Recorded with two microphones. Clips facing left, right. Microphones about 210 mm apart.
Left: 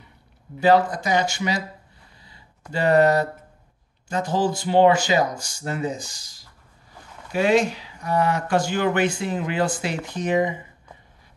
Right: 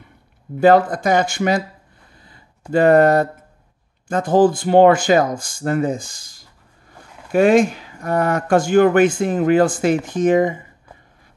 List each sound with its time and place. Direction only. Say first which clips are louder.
0.6 s speech: right 5 dB; 55° right (ahead or behind)
2.1 s a sound: right 5 dB; 50° right (ahead or behind)
2.7 s speech: right 5 dB; 50° right (ahead or behind)